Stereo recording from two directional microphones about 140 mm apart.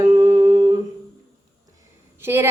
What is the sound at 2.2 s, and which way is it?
Speech, 15° right (ahead or behind).